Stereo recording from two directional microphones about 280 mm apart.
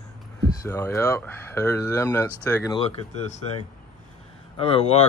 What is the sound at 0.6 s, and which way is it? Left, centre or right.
Speech, centre.